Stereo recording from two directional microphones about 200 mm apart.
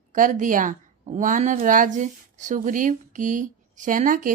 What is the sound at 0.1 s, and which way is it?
A woman's voice, 40° right (ahead or behind).